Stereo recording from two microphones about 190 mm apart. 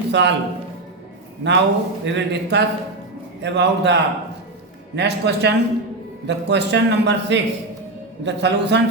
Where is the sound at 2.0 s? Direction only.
65° right (ahead or behind).